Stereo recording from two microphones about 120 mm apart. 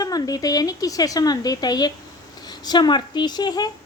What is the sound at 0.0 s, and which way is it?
A woman's voice, 30° left (ahead or behind).